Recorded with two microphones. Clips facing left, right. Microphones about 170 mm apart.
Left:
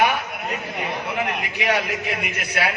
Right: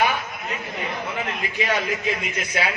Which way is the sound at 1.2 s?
70° left (ahead or behind).